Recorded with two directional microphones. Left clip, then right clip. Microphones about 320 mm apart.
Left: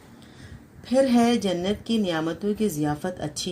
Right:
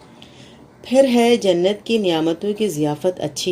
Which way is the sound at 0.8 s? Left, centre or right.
Left.